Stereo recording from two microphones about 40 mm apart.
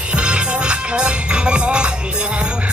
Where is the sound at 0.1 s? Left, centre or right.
Right.